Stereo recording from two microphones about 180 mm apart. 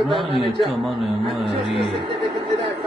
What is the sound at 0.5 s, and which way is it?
Speech, centre (ahead or behind).